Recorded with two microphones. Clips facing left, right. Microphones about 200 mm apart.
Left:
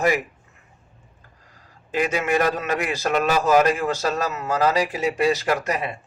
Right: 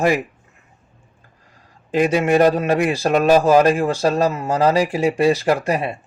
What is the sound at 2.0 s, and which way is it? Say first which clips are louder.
A man's voice: right 6 dB; 30° right (ahead or behind).